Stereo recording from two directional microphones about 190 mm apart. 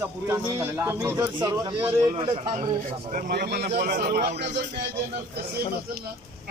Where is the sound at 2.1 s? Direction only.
30° right (ahead or behind).